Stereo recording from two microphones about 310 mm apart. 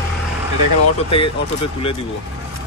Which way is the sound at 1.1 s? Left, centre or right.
Centre.